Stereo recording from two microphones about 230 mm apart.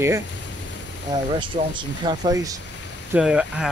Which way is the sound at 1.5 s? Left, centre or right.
Right.